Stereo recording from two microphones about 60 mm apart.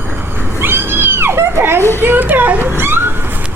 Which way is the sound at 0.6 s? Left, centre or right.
Right.